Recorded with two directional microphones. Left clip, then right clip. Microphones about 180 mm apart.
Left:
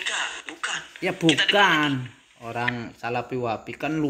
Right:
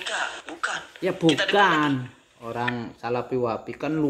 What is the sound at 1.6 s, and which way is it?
Speech, 15° left (ahead or behind).